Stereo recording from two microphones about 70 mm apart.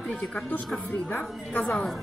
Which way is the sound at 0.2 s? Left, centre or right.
Centre.